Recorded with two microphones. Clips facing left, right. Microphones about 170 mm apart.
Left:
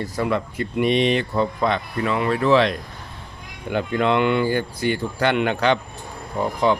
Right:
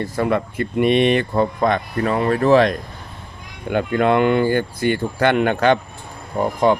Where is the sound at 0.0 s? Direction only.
55° right (ahead or behind).